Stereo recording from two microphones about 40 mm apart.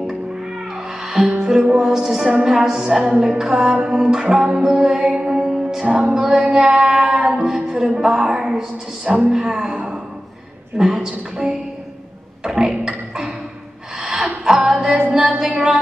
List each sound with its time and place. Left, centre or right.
1.0 s music: centre
1.6 s a woman's voice: centre
3.9 s a woman's voice: centre
4.6 s music: centre
5.9 s a woman's voice: centre
7.2 s a sound: centre
7.5 s music: right
8.0 s a woman's voice: centre
12.4 s beatboxing: centre
13.9 s gasp: right
14.9 s music: right
15.5 s a woman's voice: right